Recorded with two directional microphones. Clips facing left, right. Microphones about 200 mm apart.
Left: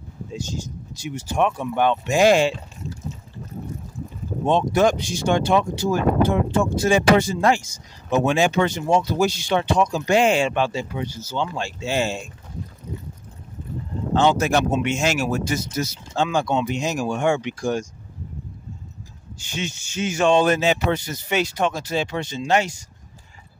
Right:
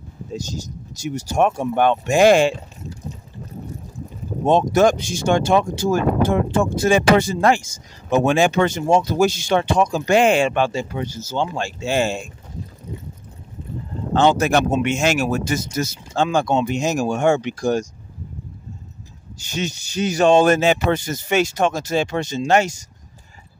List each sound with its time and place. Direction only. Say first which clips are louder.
0.3 s speech: right 2 dB; 40° right (ahead or behind)
4.5 s speech: right 3 dB; 45° right (ahead or behind)
14.1 s speech: right 2 dB; 55° right (ahead or behind); by 17.8 s 40° right (ahead or behind)
19.3 s speech: right 4 dB; 40° right (ahead or behind)